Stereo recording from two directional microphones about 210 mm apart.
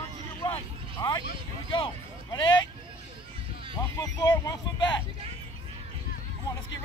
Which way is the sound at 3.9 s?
15° left (ahead or behind).